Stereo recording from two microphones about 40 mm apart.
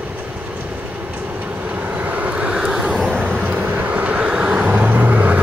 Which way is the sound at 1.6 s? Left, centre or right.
Right.